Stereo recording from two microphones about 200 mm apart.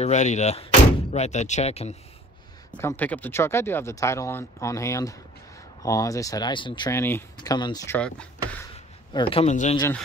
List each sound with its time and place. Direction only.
0.0 s speech: 35° left (ahead or behind)
2.7 s speech: 10° left (ahead or behind)
7.3 s speech: 20° left (ahead or behind); by 8.6 s 5° left (ahead or behind)
8.7 s a sound: 25° left (ahead or behind)